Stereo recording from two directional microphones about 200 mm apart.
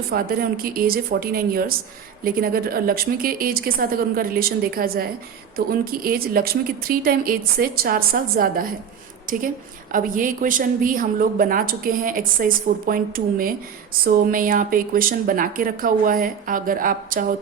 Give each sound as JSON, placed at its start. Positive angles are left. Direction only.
{"t": 0.1, "sound": "a woman's voice", "side_deg": -45}